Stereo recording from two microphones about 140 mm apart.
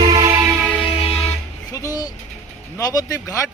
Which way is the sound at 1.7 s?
25° left (ahead or behind).